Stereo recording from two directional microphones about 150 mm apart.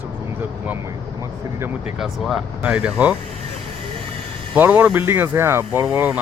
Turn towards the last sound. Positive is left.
turn(degrees=-10)  # may be behind; listen again after turning